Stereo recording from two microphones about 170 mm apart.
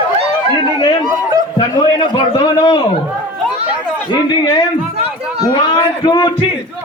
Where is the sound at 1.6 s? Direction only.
30° left (ahead or behind).